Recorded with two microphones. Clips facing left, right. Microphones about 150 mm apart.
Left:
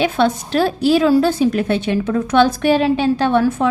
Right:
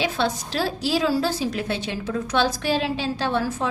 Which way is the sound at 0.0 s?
55° left (ahead or behind).